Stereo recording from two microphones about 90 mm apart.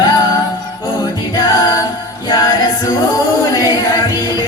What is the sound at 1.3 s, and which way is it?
A capella, 45° left (ahead or behind).